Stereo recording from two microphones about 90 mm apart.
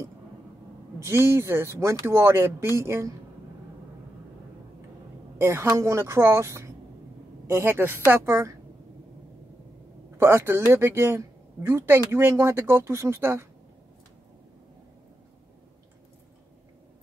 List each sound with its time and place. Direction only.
0.9 s speech: 30° right (ahead or behind)
5.4 s a woman's voice: 30° right (ahead or behind)
10.1 s speech: 30° right (ahead or behind)